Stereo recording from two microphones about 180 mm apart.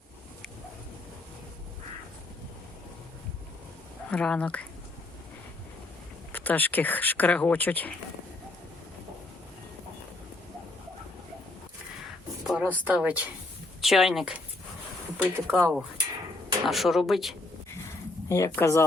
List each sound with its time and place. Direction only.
4.1 s speech: 5° left (ahead or behind)
6.3 s speech: 10° left (ahead or behind)
12.5 s speech: 5° right (ahead or behind)
18.3 s speech: 15° left (ahead or behind)